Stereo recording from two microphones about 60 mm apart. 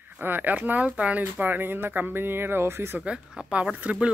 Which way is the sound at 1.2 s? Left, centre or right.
Right.